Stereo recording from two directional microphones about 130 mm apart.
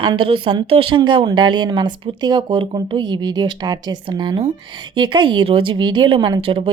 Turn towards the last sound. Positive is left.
turn(degrees=-45)  # may be behind; listen again after turning